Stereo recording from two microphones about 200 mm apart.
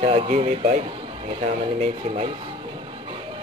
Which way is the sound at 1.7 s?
30° right (ahead or behind).